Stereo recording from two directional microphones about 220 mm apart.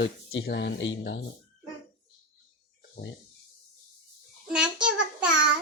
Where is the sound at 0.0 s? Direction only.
55° left (ahead or behind).